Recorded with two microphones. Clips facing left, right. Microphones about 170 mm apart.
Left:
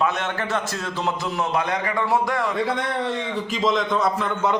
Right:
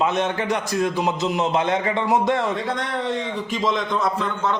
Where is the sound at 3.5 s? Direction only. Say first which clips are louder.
Left 2 dB; centre (ahead or behind).